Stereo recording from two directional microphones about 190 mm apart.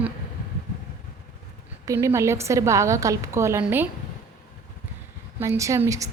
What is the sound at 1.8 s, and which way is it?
A woman's voice, 15° right (ahead or behind).